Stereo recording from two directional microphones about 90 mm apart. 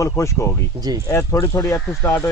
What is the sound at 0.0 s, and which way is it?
A man's voice, 30° left (ahead or behind).